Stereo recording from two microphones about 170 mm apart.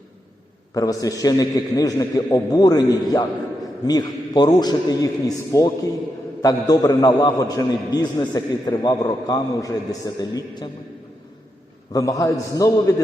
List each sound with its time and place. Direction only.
0.7 s a man's voice: 20° left (ahead or behind)
11.9 s a man's voice: 20° left (ahead or behind)